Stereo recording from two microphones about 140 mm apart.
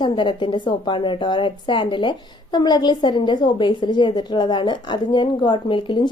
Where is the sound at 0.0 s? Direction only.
35° left (ahead or behind).